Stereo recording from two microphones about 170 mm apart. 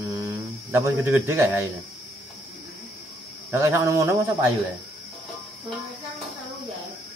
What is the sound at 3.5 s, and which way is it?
Speech, 15° right (ahead or behind).